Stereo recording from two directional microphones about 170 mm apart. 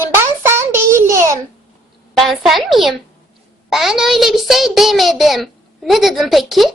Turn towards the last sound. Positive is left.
turn(degrees=0)  # may be behind; listen again after turning